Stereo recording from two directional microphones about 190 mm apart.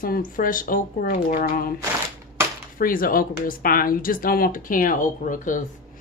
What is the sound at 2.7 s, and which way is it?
Speech, 50° left (ahead or behind).